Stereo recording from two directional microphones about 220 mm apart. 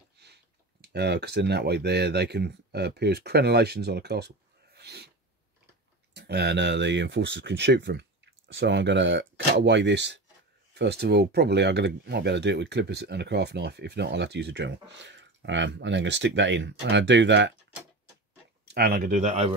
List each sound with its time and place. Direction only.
0.2 s speech: 50° right (ahead or behind)
4.7 s sneeze: 50° right (ahead or behind)
6.1 s speech: 50° right (ahead or behind)
18.7 s speech: 40° right (ahead or behind)